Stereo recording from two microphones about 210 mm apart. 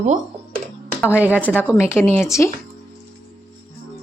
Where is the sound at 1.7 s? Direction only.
10° left (ahead or behind).